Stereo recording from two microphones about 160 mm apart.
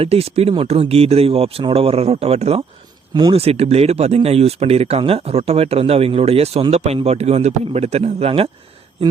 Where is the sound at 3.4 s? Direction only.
40° right (ahead or behind).